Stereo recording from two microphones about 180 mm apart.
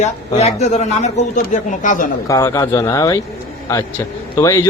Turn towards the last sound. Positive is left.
turn(degrees=15)  # may be behind; listen again after turning